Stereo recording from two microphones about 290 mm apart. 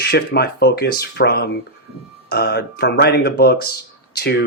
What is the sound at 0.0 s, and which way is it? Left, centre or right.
Speech, left.